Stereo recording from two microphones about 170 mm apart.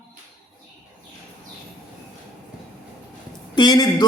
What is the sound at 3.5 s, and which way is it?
Speech, 25° left (ahead or behind).